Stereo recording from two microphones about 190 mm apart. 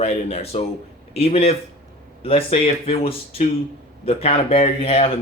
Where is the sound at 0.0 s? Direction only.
35° left (ahead or behind).